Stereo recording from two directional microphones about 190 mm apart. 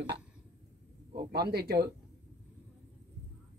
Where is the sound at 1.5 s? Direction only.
55° right (ahead or behind).